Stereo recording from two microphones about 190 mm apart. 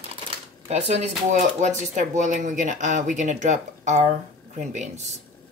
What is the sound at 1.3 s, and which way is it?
Speech, 40° right (ahead or behind).